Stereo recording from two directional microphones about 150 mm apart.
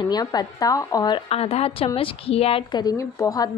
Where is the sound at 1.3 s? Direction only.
40° left (ahead or behind).